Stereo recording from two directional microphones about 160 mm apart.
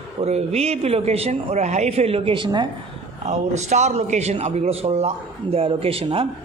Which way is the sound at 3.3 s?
45° right (ahead or behind).